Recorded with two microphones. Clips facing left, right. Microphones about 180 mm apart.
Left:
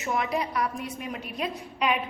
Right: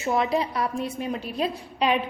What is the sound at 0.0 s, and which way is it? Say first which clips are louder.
A woman's voice: right 4 dB; 30° right (ahead or behind).